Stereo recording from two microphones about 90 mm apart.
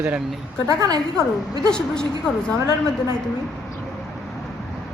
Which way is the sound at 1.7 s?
10° left (ahead or behind).